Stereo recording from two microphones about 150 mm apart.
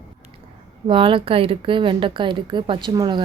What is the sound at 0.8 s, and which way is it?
Speech, 35° right (ahead or behind).